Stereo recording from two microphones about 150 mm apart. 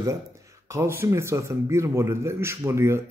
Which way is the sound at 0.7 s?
15° right (ahead or behind).